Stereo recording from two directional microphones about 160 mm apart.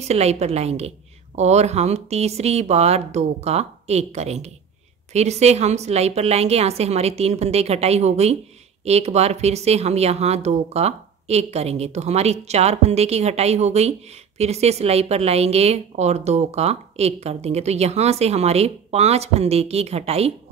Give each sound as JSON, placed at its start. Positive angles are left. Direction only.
{"t": 0.1, "sound": "a woman's voice", "side_deg": -40}